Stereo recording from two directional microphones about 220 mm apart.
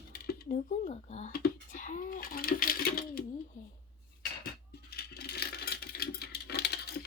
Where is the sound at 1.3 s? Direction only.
40° left (ahead or behind).